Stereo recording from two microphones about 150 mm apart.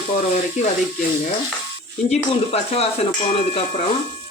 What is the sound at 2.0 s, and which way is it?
Speech, 40° left (ahead or behind).